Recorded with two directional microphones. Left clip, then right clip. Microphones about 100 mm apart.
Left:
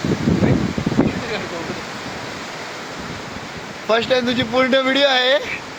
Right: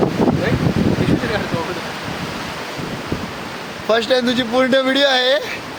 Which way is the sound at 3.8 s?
30° right (ahead or behind).